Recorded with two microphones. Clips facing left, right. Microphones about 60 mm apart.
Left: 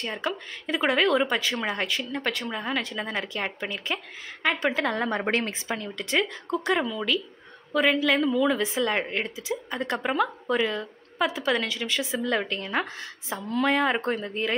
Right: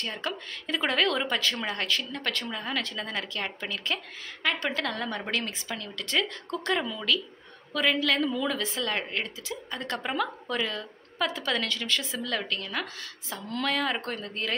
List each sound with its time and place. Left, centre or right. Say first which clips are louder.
0.0 s a woman's voice: left 3 dB; centre